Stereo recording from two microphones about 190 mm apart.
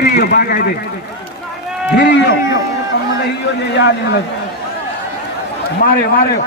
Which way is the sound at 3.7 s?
65° left (ahead or behind).